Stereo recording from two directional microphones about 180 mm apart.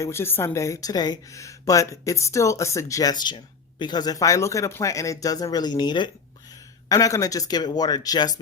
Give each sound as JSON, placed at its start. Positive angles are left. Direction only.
{"t": 0.0, "sound": "speech", "side_deg": 15}